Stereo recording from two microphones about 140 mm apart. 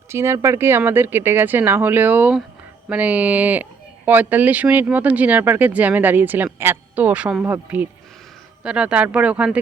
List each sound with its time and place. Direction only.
0.1 s speech: 20° right (ahead or behind)